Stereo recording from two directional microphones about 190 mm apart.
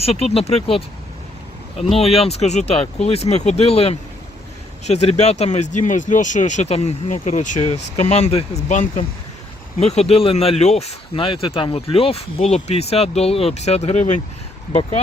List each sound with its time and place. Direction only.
0.0 s speech: 30° left (ahead or behind)